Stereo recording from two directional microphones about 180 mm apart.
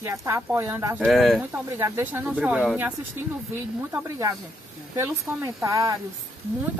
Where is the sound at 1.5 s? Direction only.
15° right (ahead or behind).